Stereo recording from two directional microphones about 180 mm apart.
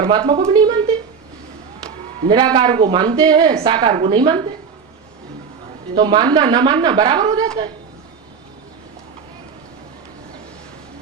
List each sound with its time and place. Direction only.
0.0 s a woman's voice: 25° right (ahead or behind)
2.2 s a woman's voice: 25° right (ahead or behind)
5.9 s a woman's voice: 25° right (ahead or behind)